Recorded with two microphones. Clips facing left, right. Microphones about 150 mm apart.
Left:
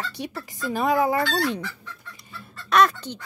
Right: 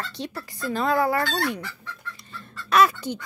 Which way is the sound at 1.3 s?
20° left (ahead or behind).